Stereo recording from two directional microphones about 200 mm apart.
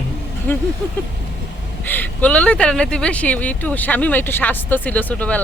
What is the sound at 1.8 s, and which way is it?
Speech, 10° left (ahead or behind).